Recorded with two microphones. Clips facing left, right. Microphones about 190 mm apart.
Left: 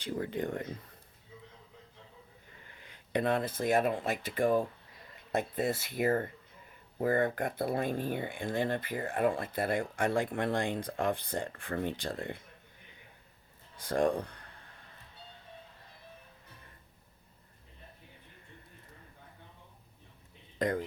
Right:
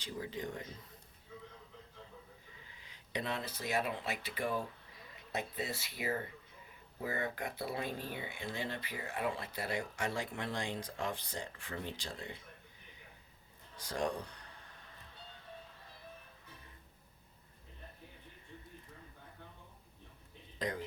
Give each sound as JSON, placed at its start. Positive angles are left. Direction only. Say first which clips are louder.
{"t": 0.0, "sound": "speech", "louder": "left 7 dB", "side_deg": 55}
{"t": 2.6, "sound": "speech", "louder": "left 4 dB", "side_deg": 55}
{"t": 13.7, "sound": "speech", "louder": "left 8 dB", "side_deg": 55}
{"t": 20.6, "sound": "speech", "louder": "left 8 dB", "side_deg": 55}